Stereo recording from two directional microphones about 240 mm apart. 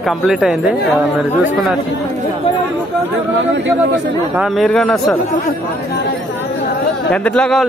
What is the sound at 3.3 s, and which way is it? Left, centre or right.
Speech, right.